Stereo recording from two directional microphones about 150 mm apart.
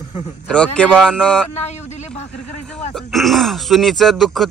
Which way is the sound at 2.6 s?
5° left (ahead or behind).